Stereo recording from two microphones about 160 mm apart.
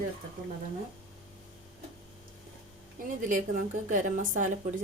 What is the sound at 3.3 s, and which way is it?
Speech, 55° right (ahead or behind).